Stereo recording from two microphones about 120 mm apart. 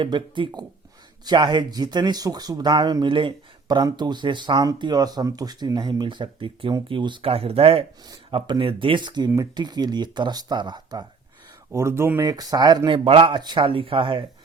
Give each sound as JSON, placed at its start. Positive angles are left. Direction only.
{"t": 0.0, "sound": "speech", "side_deg": -40}
{"t": 11.7, "sound": "speech", "side_deg": -25}
{"t": 12.3, "sound": "speech", "side_deg": -35}
{"t": 13.1, "sound": "speech", "side_deg": -50}